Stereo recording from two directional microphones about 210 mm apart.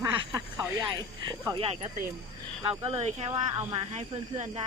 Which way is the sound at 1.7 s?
30° right (ahead or behind).